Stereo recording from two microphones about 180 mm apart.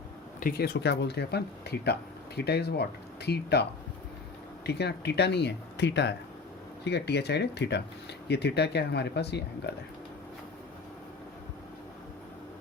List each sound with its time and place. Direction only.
0.3 s speech: 55° left (ahead or behind); by 9.7 s 70° left (ahead or behind)